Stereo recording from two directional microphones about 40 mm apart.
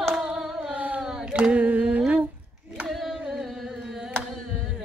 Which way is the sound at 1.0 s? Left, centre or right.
Centre.